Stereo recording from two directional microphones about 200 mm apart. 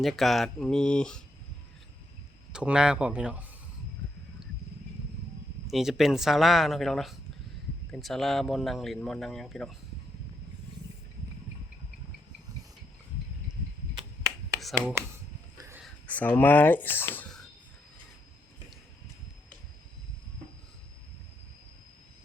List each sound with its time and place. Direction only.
0.0 s speech: centre (ahead or behind)
2.5 s speech: 5° right (ahead or behind)
5.6 s speech: centre (ahead or behind)
14.6 s speech: centre (ahead or behind)
15.5 s a sound: 15° right (ahead or behind)
15.8 s speech: 5° left (ahead or behind)